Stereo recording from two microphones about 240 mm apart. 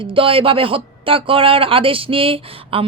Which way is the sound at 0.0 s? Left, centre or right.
Right.